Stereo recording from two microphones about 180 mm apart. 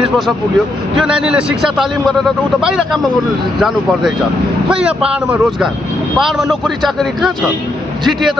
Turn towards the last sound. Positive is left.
turn(degrees=0)  # may be behind; listen again after turning